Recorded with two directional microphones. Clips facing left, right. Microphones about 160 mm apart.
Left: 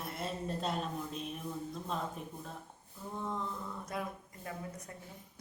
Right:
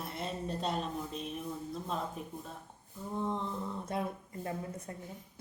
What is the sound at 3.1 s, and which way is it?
A woman's voice, 20° right (ahead or behind).